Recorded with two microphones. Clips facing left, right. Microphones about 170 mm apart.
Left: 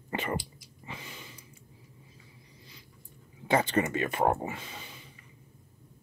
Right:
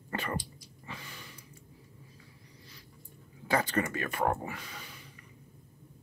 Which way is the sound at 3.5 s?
25° left (ahead or behind).